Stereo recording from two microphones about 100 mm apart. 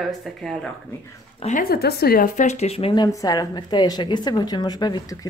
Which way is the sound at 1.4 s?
80° left.